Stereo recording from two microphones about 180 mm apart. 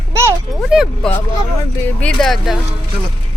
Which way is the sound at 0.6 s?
Centre (ahead or behind).